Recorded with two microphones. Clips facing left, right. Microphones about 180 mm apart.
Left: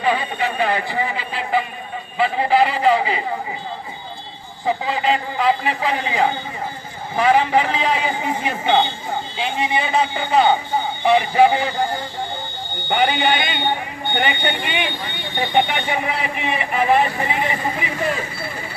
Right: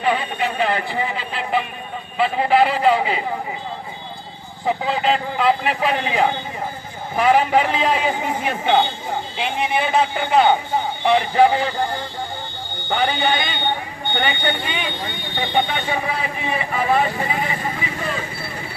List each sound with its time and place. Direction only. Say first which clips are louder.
0.6 s a man's voice: left 1 dB; centre (ahead or behind)
4.6 s a man's voice: even; centre (ahead or behind)
12.9 s speech: left 2 dB; 15° left (ahead or behind)